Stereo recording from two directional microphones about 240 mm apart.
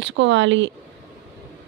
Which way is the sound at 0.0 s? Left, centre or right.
Right.